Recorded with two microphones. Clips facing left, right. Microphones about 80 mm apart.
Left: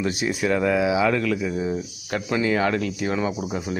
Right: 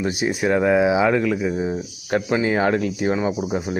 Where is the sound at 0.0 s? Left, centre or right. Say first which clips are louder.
Right 2 dB; right.